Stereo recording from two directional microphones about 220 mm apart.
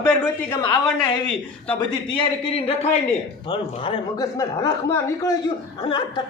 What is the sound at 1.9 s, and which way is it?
A woman's voice, 25° left (ahead or behind).